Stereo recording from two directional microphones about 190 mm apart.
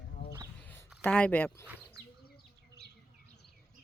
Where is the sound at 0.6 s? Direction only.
10° left (ahead or behind).